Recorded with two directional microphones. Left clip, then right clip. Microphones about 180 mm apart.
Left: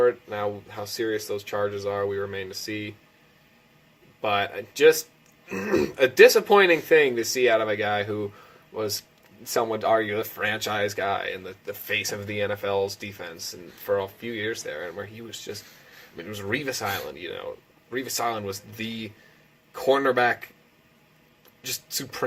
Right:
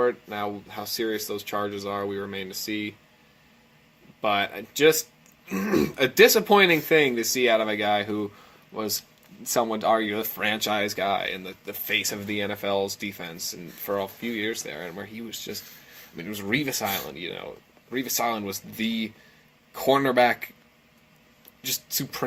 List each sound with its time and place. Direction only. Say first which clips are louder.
0.0 s speech: left 3 dB; 35° right (ahead or behind)
4.2 s speech: even; 35° right (ahead or behind)
21.6 s speech: right 2 dB; 35° right (ahead or behind)